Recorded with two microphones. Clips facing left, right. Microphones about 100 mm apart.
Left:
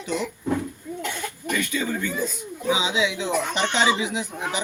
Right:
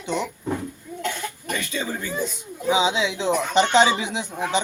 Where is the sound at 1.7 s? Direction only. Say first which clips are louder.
Left 2 dB; 30° right (ahead or behind).